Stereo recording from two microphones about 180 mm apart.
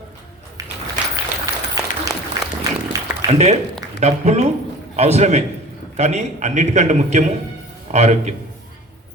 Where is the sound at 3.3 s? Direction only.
40° right (ahead or behind).